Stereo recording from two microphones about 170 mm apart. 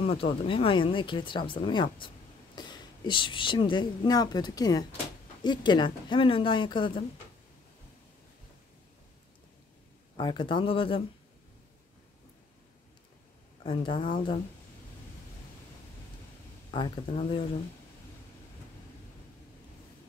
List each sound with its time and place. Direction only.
0.0 s speech: 35° left (ahead or behind)
10.1 s speech: 30° left (ahead or behind)
13.7 s speech: 30° left (ahead or behind)
16.7 s speech: 30° left (ahead or behind)